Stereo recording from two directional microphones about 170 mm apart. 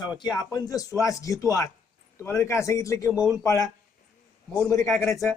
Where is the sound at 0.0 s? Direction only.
25° left (ahead or behind).